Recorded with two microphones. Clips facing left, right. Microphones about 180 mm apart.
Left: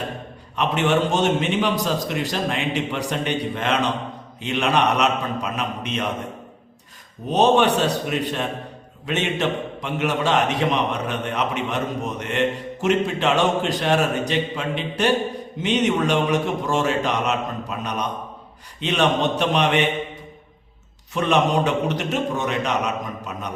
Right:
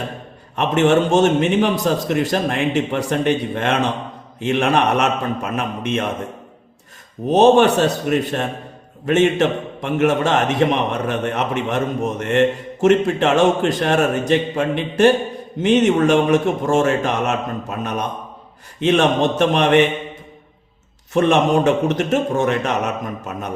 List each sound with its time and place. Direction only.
0.5 s a man's voice: 50° right (ahead or behind)
7.3 s a man's voice: 45° right (ahead or behind)
21.1 s a man's voice: 50° right (ahead or behind)